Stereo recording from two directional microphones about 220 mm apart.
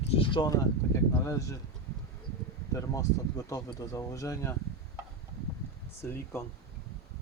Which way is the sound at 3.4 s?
15° left (ahead or behind).